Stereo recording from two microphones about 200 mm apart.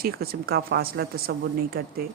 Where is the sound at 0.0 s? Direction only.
50° right (ahead or behind).